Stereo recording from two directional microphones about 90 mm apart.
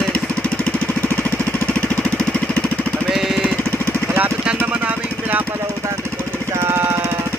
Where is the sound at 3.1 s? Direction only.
5° right (ahead or behind).